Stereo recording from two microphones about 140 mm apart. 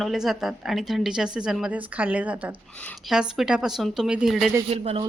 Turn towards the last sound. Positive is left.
turn(degrees=-50)  # may be behind; listen again after turning